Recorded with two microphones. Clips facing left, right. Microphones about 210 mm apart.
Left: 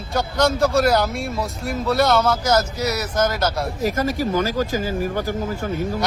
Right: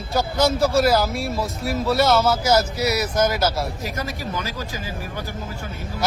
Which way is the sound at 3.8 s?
45° left (ahead or behind).